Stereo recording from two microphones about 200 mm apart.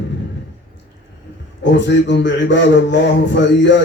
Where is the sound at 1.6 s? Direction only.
65° left (ahead or behind).